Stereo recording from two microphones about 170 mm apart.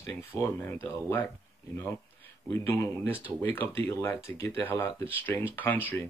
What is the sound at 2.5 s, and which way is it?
Speech, 15° left (ahead or behind).